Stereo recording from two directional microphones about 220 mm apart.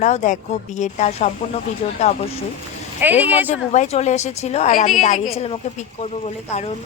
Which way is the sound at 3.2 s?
10° right (ahead or behind).